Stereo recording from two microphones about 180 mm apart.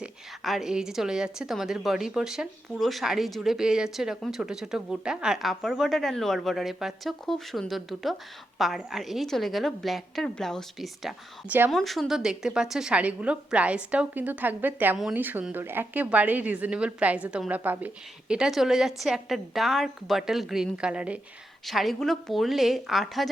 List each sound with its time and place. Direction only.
0.0 s a woman's voice: centre (ahead or behind)